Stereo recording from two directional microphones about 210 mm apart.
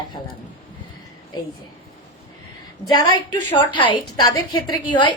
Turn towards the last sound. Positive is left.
turn(degrees=20)  # may be behind; listen again after turning